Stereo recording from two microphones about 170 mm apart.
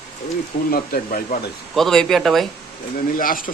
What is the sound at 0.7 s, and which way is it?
Speech, 55° left (ahead or behind).